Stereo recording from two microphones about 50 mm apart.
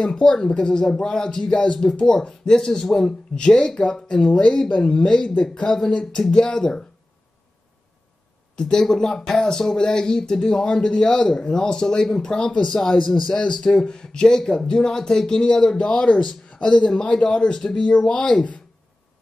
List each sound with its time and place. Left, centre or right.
0.0 s speech: centre
8.5 s speech: centre